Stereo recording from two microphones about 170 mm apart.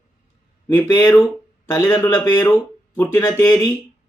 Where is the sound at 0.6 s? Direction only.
10° left (ahead or behind).